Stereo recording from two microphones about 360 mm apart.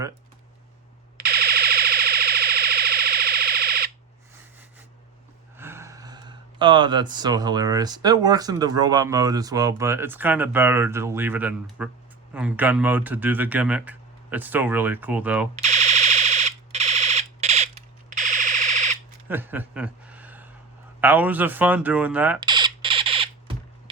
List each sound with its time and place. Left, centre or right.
1.1 s siren: right
5.5 s speech: centre
15.5 s alarm: centre
19.3 s a sound: centre
21.0 s speech: centre